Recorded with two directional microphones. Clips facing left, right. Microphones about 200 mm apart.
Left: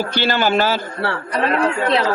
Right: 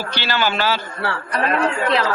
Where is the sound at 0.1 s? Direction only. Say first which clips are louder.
Left 2 dB; 50° left (ahead or behind).